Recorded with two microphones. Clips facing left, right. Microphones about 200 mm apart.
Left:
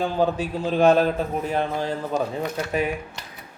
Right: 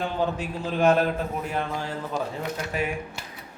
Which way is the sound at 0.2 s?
35° left (ahead or behind).